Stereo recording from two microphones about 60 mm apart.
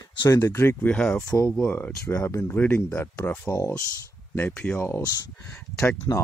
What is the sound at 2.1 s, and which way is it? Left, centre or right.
Speech, left.